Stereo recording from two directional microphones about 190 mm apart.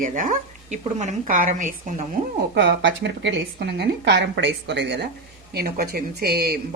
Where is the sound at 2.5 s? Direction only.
65° right (ahead or behind).